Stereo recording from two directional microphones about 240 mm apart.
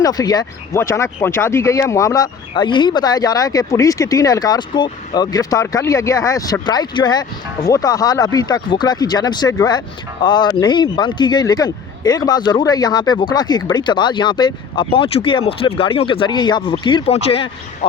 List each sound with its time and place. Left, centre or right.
0.0 s speech: centre